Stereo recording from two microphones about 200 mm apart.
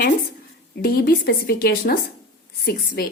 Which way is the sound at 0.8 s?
50° left (ahead or behind).